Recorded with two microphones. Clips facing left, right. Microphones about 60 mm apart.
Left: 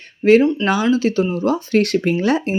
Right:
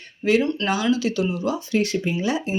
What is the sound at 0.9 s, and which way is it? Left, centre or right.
Speech, left.